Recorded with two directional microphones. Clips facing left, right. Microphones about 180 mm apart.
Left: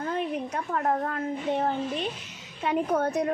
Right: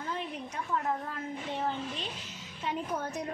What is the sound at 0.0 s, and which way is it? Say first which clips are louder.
A woman's voice: left 8 dB; 55° left (ahead or behind).